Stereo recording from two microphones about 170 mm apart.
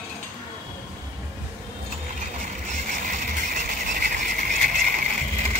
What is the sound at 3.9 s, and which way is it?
Vehicle, 55° right (ahead or behind).